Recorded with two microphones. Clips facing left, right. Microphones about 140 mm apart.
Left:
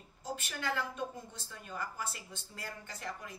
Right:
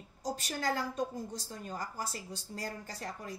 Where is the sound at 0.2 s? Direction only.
35° right (ahead or behind).